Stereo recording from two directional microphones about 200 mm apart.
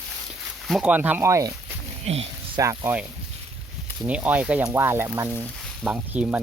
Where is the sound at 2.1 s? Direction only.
30° right (ahead or behind).